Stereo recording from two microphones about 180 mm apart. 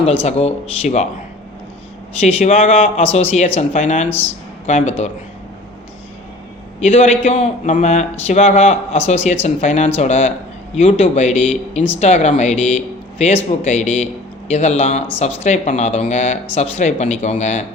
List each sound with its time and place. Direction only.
0.2 s speech: 35° left (ahead or behind)
2.2 s speech: 35° left (ahead or behind)
6.7 s speech: 40° left (ahead or behind)